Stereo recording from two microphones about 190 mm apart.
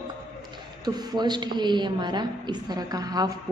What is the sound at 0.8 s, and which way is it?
A woman's voice, 20° right (ahead or behind).